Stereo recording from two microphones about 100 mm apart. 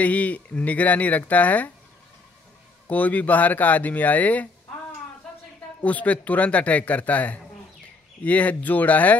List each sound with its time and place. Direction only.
0.0 s a man's voice: 15° left (ahead or behind)
2.9 s a man's voice: 15° left (ahead or behind)
5.8 s a man's voice: 15° left (ahead or behind)